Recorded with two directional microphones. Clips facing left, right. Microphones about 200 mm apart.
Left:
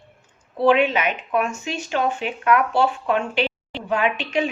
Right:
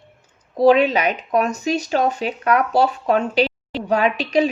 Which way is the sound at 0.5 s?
40° right (ahead or behind).